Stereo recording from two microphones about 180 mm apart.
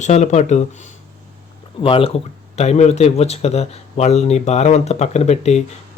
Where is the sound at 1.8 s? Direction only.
30° left (ahead or behind).